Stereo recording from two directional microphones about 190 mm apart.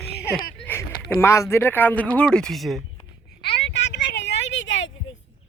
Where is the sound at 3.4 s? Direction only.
65° left (ahead or behind); by 5.1 s 85° left.